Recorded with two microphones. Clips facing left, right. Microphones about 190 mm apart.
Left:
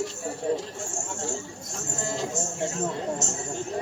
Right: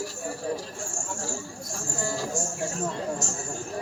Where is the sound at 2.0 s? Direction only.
20° left (ahead or behind).